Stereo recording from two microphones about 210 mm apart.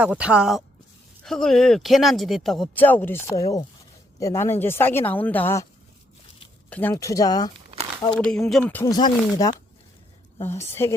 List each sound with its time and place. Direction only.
0.0 s speech: 5° right (ahead or behind); by 5.6 s 10° left (ahead or behind)
6.7 s speech: 10° left (ahead or behind)
8.1 s speech: 5° left (ahead or behind)